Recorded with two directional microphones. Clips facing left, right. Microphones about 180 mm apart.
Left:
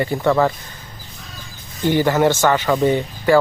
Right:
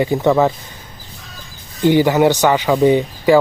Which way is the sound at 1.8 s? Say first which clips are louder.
Right 4 dB; 15° right (ahead or behind).